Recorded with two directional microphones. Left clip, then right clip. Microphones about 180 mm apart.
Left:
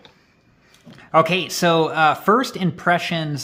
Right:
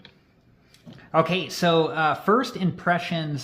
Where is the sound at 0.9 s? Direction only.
35° left (ahead or behind).